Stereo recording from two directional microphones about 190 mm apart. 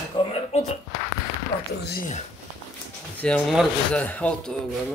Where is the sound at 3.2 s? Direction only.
5° left (ahead or behind).